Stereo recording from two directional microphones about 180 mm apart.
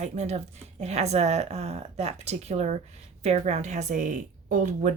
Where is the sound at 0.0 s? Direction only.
40° right (ahead or behind).